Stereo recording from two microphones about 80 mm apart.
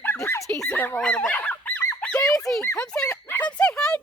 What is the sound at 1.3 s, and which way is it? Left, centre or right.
Fowl, centre.